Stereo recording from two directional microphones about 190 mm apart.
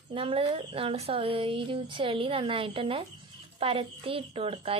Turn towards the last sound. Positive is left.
turn(degrees=-30)  # may be behind; listen again after turning